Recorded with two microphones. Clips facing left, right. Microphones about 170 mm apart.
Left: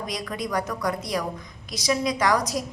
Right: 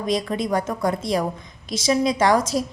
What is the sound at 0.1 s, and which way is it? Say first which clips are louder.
A woman's voice: right 8 dB; 25° right (ahead or behind).